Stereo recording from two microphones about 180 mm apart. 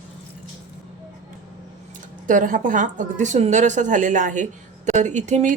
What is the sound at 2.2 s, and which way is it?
A woman's voice, 45° right (ahead or behind).